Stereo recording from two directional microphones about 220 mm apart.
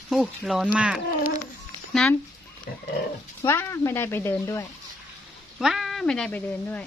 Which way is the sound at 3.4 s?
10° left (ahead or behind).